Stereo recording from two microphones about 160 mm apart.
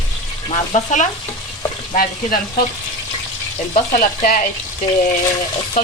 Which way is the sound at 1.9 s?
65° left (ahead or behind).